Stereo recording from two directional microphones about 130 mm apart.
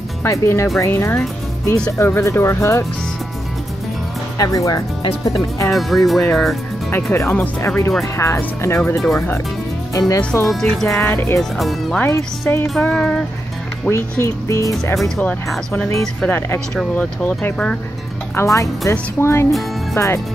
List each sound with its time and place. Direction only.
0.2 s speech: 20° left (ahead or behind)
4.4 s speech: 25° left (ahead or behind)
5.7 s speech: centre (ahead or behind)
6.9 s speech: 20° left (ahead or behind)
10.4 s speech: centre (ahead or behind)
10.9 s speech: 20° left (ahead or behind)
11.5 s speech: centre (ahead or behind)
12.5 s speech: 15° left (ahead or behind)
13.8 s speech: 20° left (ahead or behind)
15.0 s speech: 5° left (ahead or behind)
18.3 s speech: 20° left (ahead or behind)